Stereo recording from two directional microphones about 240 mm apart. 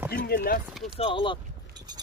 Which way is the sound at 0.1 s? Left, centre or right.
Left.